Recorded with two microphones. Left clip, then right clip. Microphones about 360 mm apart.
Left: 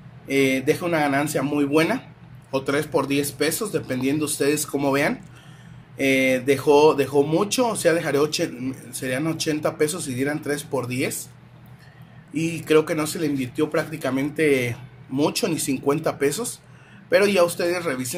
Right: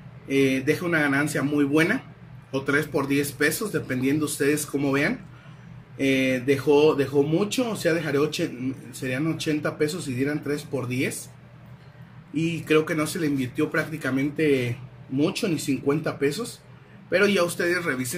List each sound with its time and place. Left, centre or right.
0.3 s speech: centre
12.4 s speech: centre